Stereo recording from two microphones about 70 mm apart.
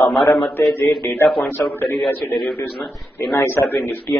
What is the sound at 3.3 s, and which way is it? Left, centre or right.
Speech, left.